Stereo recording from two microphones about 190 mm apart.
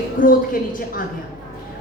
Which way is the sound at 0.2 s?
45° left (ahead or behind).